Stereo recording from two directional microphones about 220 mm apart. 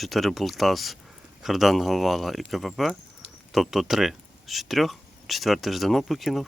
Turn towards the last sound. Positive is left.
turn(degrees=0)  # may be behind; listen again after turning